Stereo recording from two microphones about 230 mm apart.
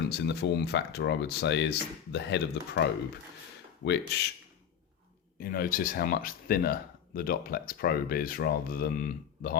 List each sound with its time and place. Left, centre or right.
0.3 s speech: left
3.8 s speech: left
5.4 s speech: left